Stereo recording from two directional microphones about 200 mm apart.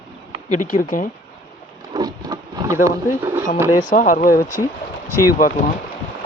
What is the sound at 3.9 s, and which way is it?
Speech, 40° left (ahead or behind).